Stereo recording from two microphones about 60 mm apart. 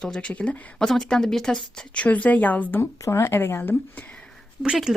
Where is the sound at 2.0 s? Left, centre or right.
Left.